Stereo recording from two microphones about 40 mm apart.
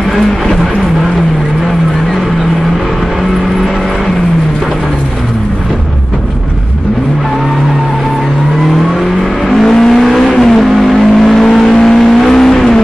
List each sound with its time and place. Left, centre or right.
9.5 s vehicle: centre